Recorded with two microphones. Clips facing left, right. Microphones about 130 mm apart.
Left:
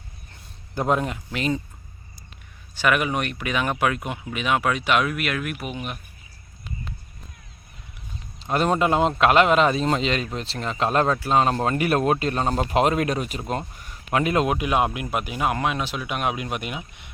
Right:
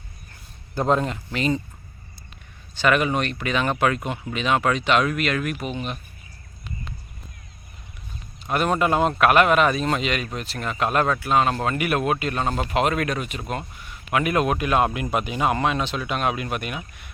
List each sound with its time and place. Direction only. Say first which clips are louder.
0.8 s speech: right 1 dB; 10° left (ahead or behind)
2.7 s speech: right 2 dB; 10° left (ahead or behind)
8.4 s a man's voice: left 1 dB; 30° left (ahead or behind)